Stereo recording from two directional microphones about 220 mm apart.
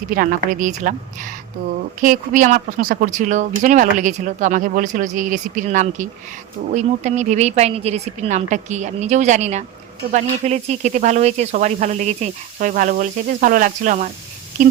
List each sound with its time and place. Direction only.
0.1 s speech: 40° right (ahead or behind)